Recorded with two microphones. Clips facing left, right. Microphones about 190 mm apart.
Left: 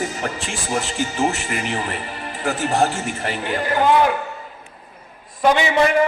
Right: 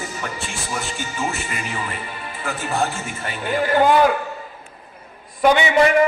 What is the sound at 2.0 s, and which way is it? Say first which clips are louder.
Music: left 4 dB; 40° left (ahead or behind).